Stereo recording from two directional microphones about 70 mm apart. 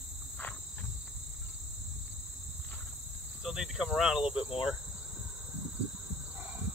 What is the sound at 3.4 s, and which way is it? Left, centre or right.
Cricket, centre.